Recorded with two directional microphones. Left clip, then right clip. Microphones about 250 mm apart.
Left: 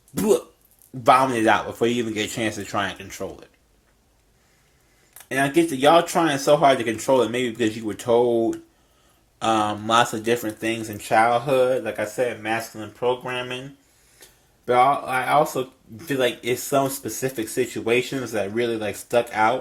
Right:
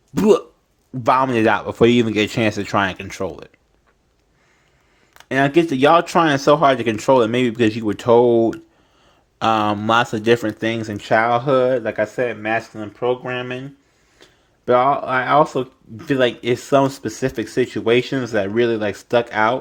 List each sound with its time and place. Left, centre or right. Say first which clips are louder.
0.1 s speech: right 6 dB; right
5.1 s speech: right 4 dB; right